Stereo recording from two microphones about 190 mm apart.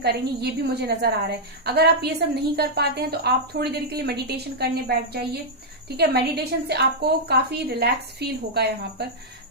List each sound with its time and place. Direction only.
0.0 s a woman's voice: 60° right (ahead or behind)